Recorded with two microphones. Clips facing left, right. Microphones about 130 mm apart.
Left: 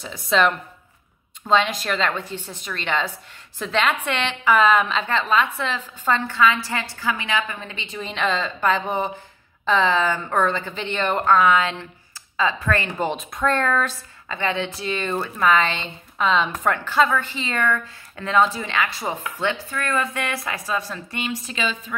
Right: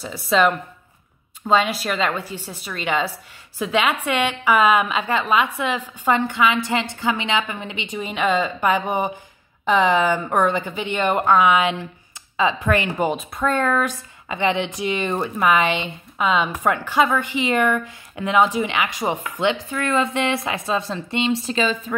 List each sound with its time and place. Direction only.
0.0 s speech: 5° right (ahead or behind); by 21.9 s 40° right (ahead or behind)